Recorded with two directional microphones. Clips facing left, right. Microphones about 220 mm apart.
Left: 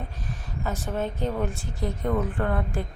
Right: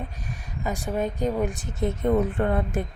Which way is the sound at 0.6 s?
15° right (ahead or behind).